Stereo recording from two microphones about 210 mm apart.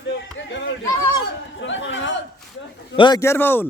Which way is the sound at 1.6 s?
65° left (ahead or behind).